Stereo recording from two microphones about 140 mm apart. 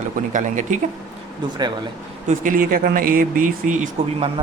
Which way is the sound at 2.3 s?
75° right (ahead or behind).